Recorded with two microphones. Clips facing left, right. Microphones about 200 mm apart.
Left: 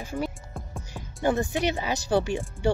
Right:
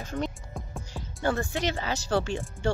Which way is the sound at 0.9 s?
15° left (ahead or behind).